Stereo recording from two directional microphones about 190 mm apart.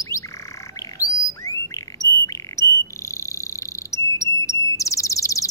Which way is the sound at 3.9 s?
15° left (ahead or behind).